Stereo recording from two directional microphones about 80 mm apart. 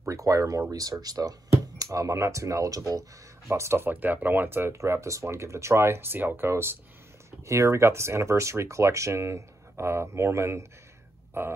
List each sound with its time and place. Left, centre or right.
0.0 s speech: right